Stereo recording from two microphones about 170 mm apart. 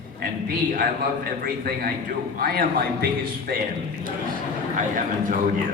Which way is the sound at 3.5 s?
75° right (ahead or behind).